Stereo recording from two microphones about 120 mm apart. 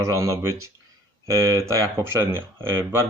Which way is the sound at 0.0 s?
25° right (ahead or behind).